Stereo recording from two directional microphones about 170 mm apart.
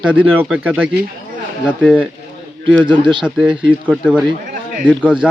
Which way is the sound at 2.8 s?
30° right (ahead or behind).